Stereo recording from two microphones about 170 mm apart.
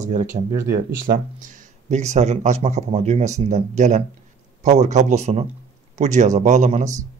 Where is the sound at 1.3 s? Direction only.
45° right (ahead or behind).